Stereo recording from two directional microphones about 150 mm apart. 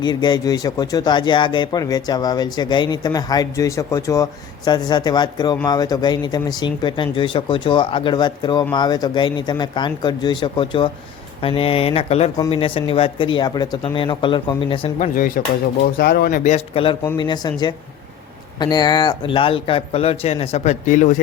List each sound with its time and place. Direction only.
0.0 s speech: 30° left (ahead or behind)
14.9 s speech: 60° left (ahead or behind)
16.0 s speech: 90° left
16.4 s speech: 45° left (ahead or behind)